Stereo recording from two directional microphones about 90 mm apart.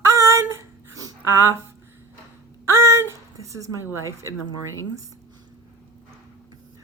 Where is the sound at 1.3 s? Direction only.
30° right (ahead or behind).